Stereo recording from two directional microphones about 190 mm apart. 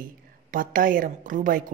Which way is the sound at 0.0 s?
45° right (ahead or behind).